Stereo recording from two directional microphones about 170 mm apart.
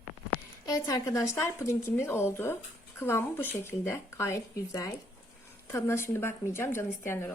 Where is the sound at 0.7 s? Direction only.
20° left (ahead or behind).